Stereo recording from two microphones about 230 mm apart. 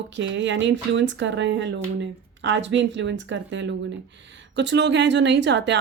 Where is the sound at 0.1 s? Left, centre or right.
Right.